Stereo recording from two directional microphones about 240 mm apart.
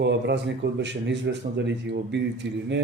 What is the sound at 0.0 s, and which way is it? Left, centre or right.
Speech, right.